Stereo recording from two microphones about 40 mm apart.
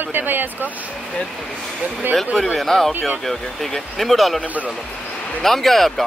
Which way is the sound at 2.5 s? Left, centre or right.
Centre.